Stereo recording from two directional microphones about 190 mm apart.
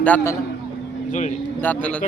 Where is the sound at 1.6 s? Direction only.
10° left (ahead or behind).